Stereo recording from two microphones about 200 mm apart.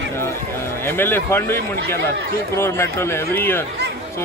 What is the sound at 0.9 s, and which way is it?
A man's voice, 10° left (ahead or behind).